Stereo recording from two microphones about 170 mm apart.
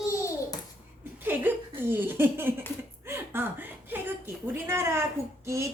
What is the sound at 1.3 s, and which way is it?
A woman's voice, 10° right (ahead or behind).